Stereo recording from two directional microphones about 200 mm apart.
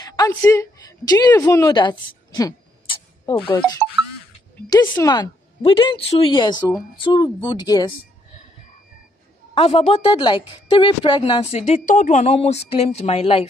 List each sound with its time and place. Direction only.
0.0 s a sound: 20° left (ahead or behind)
0.3 s a woman's voice: 15° left (ahead or behind)
4.6 s a woman's voice: 15° left (ahead or behind)
9.5 s a woman's voice: 30° left (ahead or behind)